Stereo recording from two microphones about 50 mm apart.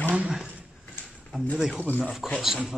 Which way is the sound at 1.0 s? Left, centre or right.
Left.